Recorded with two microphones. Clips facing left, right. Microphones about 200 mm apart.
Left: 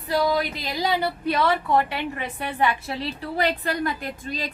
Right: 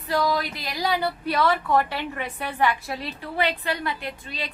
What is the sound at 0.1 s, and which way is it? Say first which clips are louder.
Speech: left 2 dB; 20° left (ahead or behind).